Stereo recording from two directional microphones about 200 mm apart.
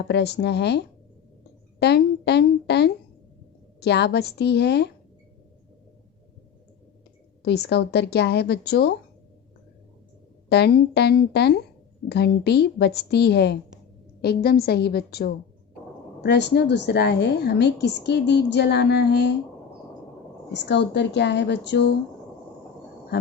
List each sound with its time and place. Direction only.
0.0 s a woman's voice: 55° left (ahead or behind)
7.4 s a woman's voice: 55° left (ahead or behind)
10.5 s a woman's voice: 55° left (ahead or behind)
20.5 s a woman's voice: 60° left (ahead or behind)